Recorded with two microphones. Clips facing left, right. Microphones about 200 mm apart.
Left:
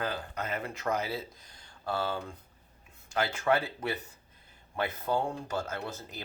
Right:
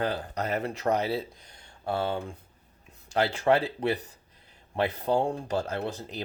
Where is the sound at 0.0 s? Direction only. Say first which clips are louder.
Right 5 dB; 35° right (ahead or behind).